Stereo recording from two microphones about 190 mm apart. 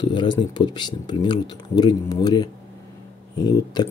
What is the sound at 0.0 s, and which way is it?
Speech, 25° left (ahead or behind).